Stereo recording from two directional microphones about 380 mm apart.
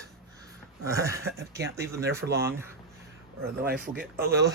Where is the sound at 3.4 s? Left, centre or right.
Right.